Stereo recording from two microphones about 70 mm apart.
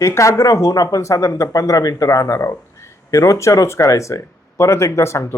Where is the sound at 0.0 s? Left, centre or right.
Left.